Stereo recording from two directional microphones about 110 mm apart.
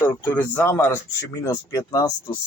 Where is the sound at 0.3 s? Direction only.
20° left (ahead or behind).